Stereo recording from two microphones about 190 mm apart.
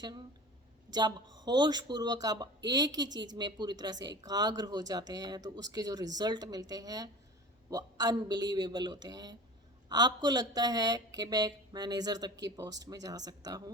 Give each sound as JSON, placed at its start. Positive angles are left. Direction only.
{"t": 0.9, "sound": "speech", "side_deg": -20}